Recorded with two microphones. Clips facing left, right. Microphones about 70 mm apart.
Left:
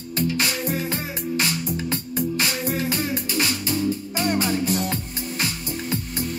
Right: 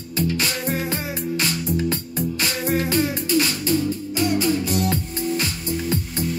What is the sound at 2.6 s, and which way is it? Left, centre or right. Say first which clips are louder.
Music: right 4 dB; right.